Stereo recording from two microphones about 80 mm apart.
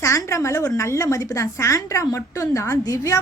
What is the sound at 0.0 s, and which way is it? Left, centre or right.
A woman's voice, left.